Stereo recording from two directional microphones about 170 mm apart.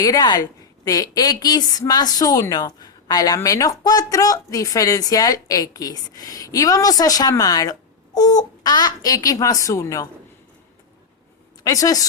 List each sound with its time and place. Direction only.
0.0 s a woman's voice: 20° left (ahead or behind)
11.6 s a woman's voice: 20° left (ahead or behind)